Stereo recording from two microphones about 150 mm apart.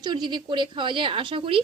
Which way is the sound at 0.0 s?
30° right (ahead or behind).